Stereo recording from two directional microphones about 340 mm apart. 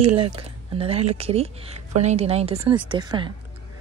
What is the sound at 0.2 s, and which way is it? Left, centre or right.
A woman's voice, centre.